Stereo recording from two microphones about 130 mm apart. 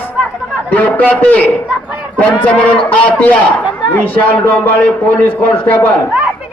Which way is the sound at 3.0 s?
10° left (ahead or behind).